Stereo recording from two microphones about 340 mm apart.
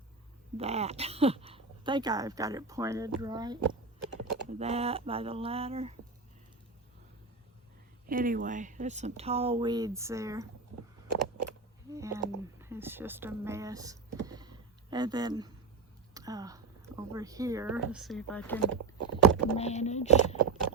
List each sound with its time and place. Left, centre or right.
0.5 s speech: centre
8.0 s speech: right; by 10.4 s centre
11.9 s speech: centre
18.9 s rowboat: right
19.5 s speech: centre